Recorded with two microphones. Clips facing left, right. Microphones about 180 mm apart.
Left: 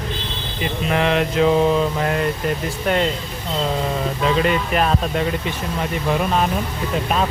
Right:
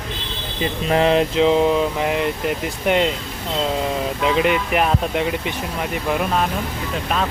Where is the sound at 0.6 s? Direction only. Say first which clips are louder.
Right 2 dB; 30° right (ahead or behind); by 3.1 s 15° right (ahead or behind).